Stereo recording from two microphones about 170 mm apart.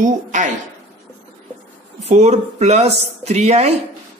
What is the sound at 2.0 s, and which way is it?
Speech, 40° right (ahead or behind).